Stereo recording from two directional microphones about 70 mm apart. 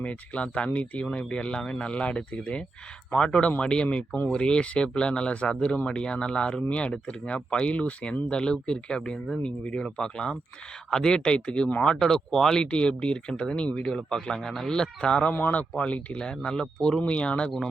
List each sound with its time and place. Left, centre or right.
0.0 s speech: centre